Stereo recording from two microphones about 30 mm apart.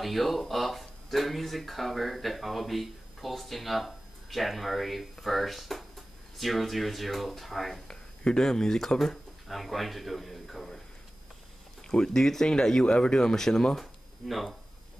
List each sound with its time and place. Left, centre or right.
0.0 s speech: centre
8.4 s speech: centre
9.5 s a man's voice: centre
11.9 s speech: left
13.7 s a sound: centre